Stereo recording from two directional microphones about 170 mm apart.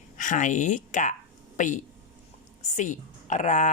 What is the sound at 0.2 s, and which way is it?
Speech, 50° left (ahead or behind).